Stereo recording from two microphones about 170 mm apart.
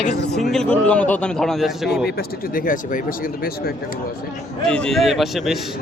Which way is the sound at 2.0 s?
60° left (ahead or behind).